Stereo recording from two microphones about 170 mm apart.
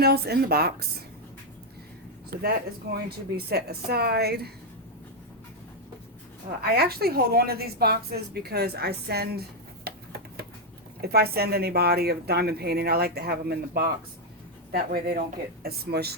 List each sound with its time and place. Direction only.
0.0 s speech: 65° right (ahead or behind)
2.3 s speech: 60° right (ahead or behind)
6.6 s a woman's voice: 65° right (ahead or behind)